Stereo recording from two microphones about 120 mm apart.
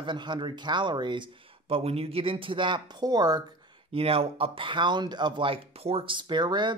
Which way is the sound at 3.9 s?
50° right (ahead or behind).